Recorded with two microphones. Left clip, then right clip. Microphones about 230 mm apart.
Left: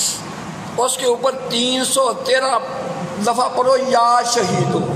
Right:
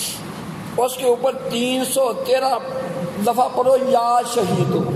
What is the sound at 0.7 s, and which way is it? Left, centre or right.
A man's voice, centre.